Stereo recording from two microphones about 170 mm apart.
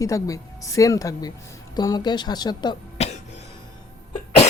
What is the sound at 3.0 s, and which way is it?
Cough, 40° left (ahead or behind).